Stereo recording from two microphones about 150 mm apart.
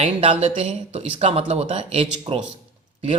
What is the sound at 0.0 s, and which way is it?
Speech, 50° right (ahead or behind).